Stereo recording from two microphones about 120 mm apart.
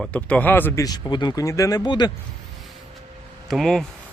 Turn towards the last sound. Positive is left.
turn(degrees=0)  # may be behind; listen again after turning